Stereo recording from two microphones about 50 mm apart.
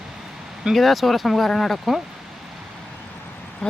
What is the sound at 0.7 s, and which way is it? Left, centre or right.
Speech, centre.